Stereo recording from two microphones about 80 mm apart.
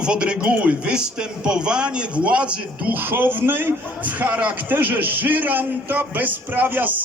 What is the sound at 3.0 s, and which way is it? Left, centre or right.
A man's voice, right.